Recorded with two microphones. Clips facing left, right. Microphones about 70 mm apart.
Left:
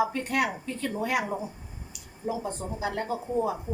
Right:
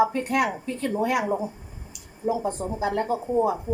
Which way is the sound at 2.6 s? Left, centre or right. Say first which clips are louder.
Right 5 dB; right.